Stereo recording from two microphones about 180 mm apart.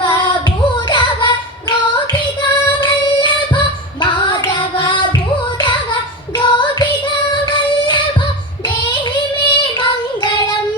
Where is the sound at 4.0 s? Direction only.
25° left (ahead or behind).